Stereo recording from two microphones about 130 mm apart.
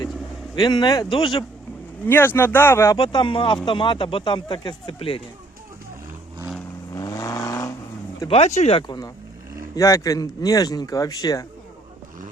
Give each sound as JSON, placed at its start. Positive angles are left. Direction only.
{"t": 0.5, "sound": "speech", "side_deg": 35}
{"t": 2.0, "sound": "speech", "side_deg": 15}
{"t": 3.0, "sound": "speech", "side_deg": 35}
{"t": 6.9, "sound": "vehicle", "side_deg": 25}
{"t": 8.3, "sound": "speech", "side_deg": 55}
{"t": 8.9, "sound": "speech", "side_deg": 30}